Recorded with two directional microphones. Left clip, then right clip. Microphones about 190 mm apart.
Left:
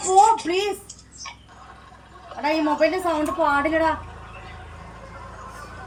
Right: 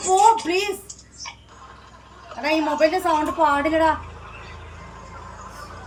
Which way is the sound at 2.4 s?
20° right (ahead or behind).